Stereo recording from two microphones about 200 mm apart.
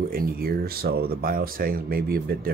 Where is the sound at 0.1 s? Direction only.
45° right (ahead or behind).